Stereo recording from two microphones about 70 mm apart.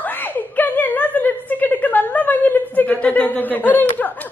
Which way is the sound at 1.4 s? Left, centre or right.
Left.